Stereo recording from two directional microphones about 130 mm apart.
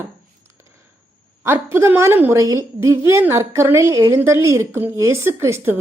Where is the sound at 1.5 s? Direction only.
20° right (ahead or behind).